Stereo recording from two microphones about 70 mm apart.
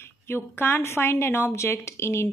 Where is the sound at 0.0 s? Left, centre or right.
Left.